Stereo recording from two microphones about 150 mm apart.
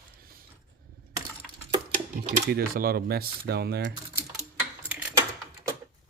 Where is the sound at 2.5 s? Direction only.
75° right (ahead or behind).